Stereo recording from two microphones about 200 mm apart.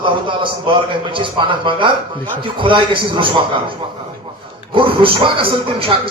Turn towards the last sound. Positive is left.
turn(degrees=-25)  # may be behind; listen again after turning